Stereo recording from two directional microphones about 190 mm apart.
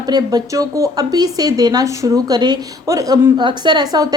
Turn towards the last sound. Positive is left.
turn(degrees=-20)  # may be behind; listen again after turning